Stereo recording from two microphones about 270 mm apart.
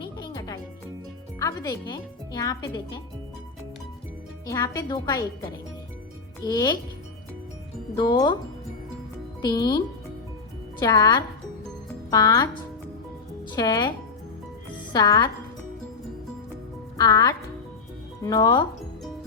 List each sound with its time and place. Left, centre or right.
0.0 s music: centre
1.4 s speech: centre
4.4 s speech: centre
6.4 s speech: centre
7.9 s speech: centre
9.4 s speech: centre
13.6 s speech: centre
14.9 s speech: centre
17.0 s speech: centre